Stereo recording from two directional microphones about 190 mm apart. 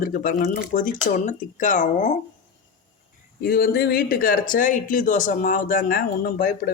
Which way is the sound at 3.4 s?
50° left (ahead or behind).